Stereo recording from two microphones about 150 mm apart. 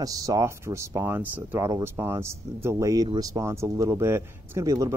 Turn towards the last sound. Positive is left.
turn(degrees=-25)  # may be behind; listen again after turning